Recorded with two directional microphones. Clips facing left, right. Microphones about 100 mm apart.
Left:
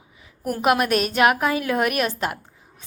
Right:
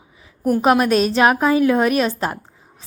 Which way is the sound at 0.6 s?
30° right (ahead or behind).